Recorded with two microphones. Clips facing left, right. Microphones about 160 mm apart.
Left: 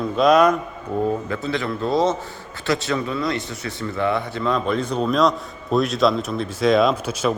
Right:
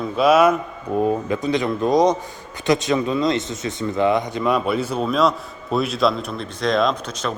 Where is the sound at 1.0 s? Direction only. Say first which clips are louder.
Right 3 dB; 15° right (ahead or behind).